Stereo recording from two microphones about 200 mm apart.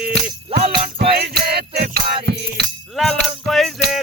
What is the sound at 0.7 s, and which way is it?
Music, 50° right (ahead or behind).